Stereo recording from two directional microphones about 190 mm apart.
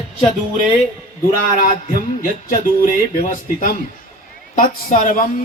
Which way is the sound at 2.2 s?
45° left (ahead or behind).